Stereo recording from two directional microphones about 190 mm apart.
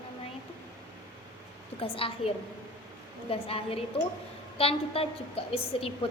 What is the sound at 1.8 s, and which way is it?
A woman's voice, 30° left (ahead or behind).